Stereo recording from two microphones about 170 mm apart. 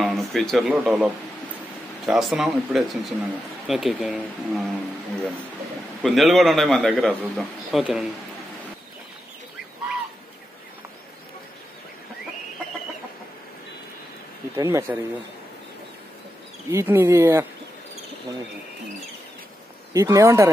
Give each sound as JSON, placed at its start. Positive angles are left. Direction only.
{"t": 0.0, "sound": "a sound", "side_deg": 0}
{"t": 0.7, "sound": "speech", "side_deg": -10}
{"t": 6.0, "sound": "speech", "side_deg": 0}
{"t": 14.6, "sound": "speech", "side_deg": -15}
{"t": 16.7, "sound": "speech", "side_deg": -15}
{"t": 19.9, "sound": "speech", "side_deg": -20}